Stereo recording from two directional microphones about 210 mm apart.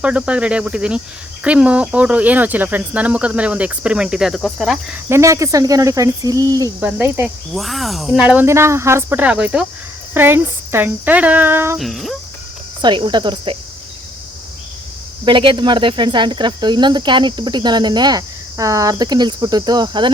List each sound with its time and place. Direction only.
0.0 s speech: 5° right (ahead or behind)
5.0 s speech: 15° right (ahead or behind)
11.8 s speech: centre (ahead or behind)
12.8 s speech: 20° right (ahead or behind)
15.2 s speech: 25° right (ahead or behind)